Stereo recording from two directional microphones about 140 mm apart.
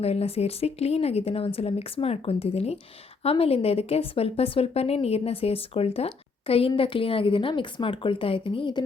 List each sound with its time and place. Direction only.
0.0 s a woman's voice: 45° left (ahead or behind)